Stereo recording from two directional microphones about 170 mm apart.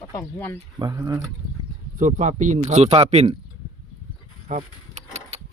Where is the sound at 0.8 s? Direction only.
25° right (ahead or behind).